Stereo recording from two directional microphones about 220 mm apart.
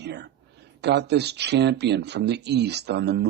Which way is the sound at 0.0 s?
50° right (ahead or behind).